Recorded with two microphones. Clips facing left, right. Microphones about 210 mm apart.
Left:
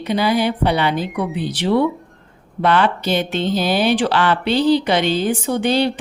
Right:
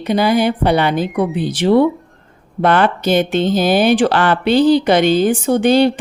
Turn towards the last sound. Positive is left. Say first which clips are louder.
# right 6 dB
turn(degrees=-50)  # may be behind; listen again after turning